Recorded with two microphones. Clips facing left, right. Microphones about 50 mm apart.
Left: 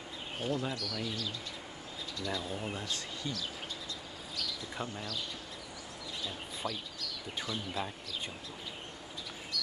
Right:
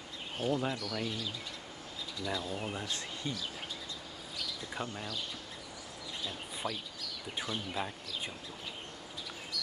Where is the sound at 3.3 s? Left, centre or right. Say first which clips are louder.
Even; right.